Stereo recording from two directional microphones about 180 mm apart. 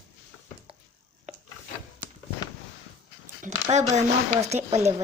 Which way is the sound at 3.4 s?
40° right (ahead or behind).